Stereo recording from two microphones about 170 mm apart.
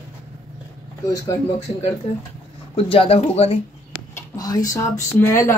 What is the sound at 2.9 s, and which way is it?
Speech, 35° left (ahead or behind).